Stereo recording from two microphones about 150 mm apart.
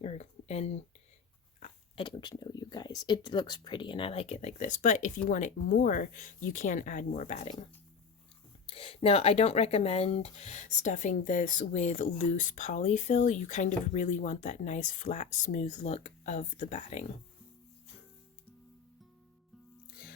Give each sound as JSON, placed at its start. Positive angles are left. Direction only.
{"t": 0.0, "sound": "a sound", "side_deg": 45}
{"t": 2.0, "sound": "speech", "side_deg": 30}
{"t": 8.6, "sound": "speech", "side_deg": 40}